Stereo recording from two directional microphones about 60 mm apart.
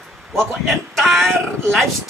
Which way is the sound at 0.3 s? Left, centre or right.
Right.